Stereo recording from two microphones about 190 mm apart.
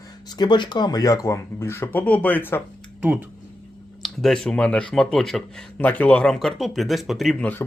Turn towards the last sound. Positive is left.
turn(degrees=5)  # may be behind; listen again after turning